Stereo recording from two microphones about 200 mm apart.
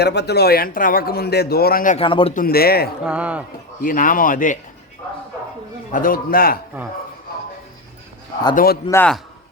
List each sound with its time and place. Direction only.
0.0 s a man's voice: 55° left (ahead or behind)
2.0 s a man's voice: 25° left (ahead or behind)
2.3 s a man's voice: 45° left (ahead or behind)
3.1 s speech: 5° right (ahead or behind)
3.8 s a man's voice: 40° left (ahead or behind)
5.9 s a man's voice: 45° left (ahead or behind)
8.5 s a man's voice: 50° left (ahead or behind)
8.9 s speech: 10° left (ahead or behind)